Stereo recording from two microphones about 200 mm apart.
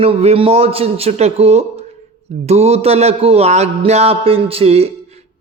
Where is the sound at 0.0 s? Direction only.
30° right (ahead or behind).